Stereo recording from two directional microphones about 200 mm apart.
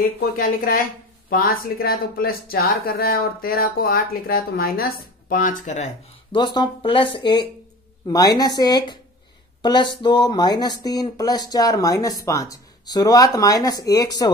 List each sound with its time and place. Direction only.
0.2 s speech: 45° left (ahead or behind)
6.3 s speech: 20° left (ahead or behind)